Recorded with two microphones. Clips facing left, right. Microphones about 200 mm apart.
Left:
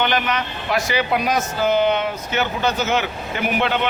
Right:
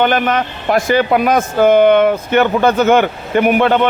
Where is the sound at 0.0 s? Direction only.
50° right (ahead or behind).